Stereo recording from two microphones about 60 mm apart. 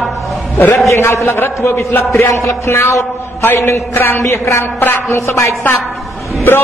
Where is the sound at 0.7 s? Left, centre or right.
Left.